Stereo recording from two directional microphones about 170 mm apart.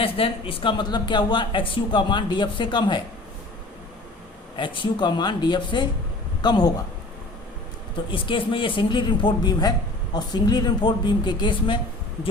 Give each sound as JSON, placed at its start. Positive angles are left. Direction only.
{"t": 0.0, "sound": "speech", "side_deg": 35}
{"t": 4.5, "sound": "speech", "side_deg": 30}
{"t": 7.9, "sound": "speech", "side_deg": 30}